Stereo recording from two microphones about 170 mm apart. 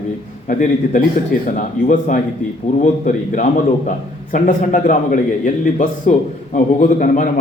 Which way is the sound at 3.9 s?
50° left (ahead or behind).